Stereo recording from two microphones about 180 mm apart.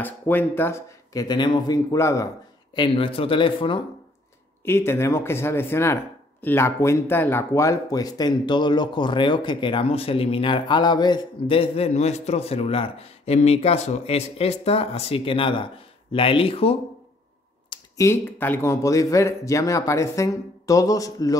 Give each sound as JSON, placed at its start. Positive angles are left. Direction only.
{"t": 0.0, "sound": "speech", "side_deg": 10}
{"t": 2.7, "sound": "speech", "side_deg": 25}
{"t": 4.6, "sound": "speech", "side_deg": 15}
{"t": 17.6, "sound": "speech", "side_deg": 15}